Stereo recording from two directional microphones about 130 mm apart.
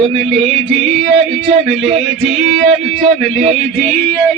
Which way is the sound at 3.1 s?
60° right (ahead or behind).